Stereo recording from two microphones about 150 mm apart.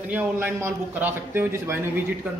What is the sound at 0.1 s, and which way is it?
A man's voice, 15° right (ahead or behind).